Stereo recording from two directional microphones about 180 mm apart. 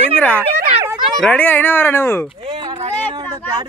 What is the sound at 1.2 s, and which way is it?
Speech, 10° left (ahead or behind).